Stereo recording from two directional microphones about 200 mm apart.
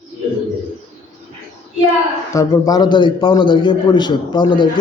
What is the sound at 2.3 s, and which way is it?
A man's voice, 15° left (ahead or behind).